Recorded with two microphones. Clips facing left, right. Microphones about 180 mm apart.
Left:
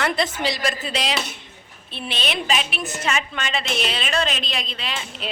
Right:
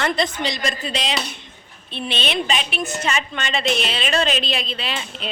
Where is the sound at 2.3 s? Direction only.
5° left (ahead or behind).